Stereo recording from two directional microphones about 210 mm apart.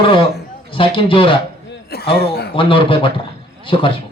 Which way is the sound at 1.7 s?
50° left (ahead or behind).